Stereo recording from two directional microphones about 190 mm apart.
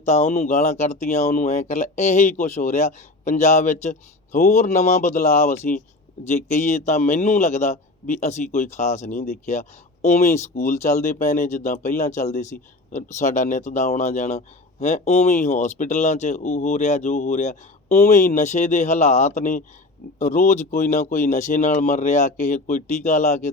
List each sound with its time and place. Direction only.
0.0 s speech: 40° left (ahead or behind)